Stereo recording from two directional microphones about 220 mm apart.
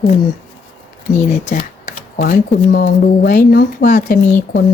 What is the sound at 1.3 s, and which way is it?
A woman's voice, 35° left (ahead or behind).